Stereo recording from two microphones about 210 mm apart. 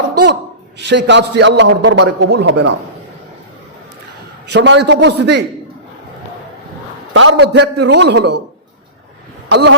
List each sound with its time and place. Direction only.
0.1 s a sound: 50° right (ahead or behind)
0.8 s a man's voice: 55° right (ahead or behind)
4.4 s a man's voice: 55° right (ahead or behind)
7.1 s a man's voice: 65° right (ahead or behind)
9.5 s a man's voice: 55° right (ahead or behind)